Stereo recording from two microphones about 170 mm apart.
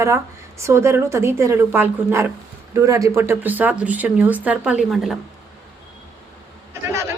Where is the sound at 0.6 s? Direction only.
15° right (ahead or behind); by 5.2 s centre (ahead or behind).